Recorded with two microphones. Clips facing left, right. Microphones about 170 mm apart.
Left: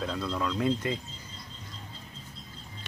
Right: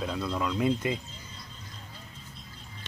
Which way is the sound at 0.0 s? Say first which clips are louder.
Right 1 dB; 10° right (ahead or behind).